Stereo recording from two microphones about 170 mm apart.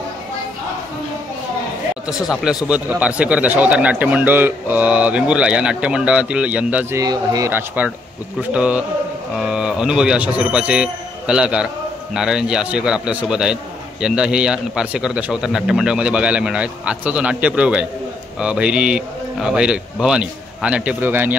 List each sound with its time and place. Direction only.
2.0 s a man's voice: 5° right (ahead or behind)
7.0 s a man's voice: 20° right (ahead or behind)